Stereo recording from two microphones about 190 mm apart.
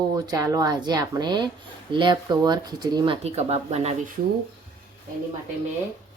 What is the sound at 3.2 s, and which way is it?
Speech, 35° right (ahead or behind).